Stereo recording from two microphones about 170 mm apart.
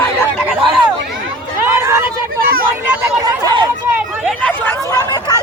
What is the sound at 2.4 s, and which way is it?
Speech, 60° right (ahead or behind).